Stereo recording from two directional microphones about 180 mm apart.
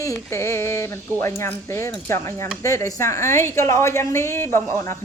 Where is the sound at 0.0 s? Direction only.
15° left (ahead or behind).